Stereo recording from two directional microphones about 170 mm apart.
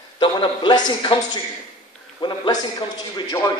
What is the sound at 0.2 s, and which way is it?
A man's voice, 30° left (ahead or behind).